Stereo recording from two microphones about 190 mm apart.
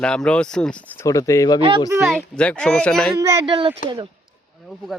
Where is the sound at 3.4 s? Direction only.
30° right (ahead or behind).